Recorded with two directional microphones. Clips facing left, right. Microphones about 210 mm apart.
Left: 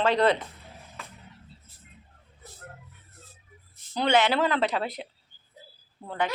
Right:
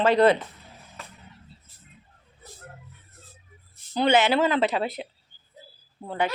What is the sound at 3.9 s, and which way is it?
A woman's voice, 5° right (ahead or behind).